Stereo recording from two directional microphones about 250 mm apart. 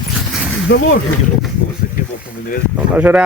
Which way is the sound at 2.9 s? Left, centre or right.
Centre.